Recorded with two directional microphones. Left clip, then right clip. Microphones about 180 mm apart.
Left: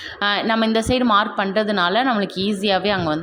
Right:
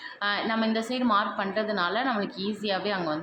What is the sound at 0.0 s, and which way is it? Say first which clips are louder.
A woman's voice: left 8 dB; 45° left (ahead or behind).